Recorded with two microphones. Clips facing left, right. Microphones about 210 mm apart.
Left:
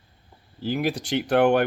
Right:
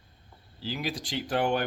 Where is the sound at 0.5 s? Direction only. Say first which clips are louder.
Left 8 dB; 55° left (ahead or behind); by 1.6 s 70° left (ahead or behind).